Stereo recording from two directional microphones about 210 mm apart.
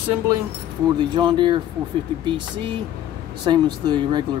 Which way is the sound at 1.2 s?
20° right (ahead or behind).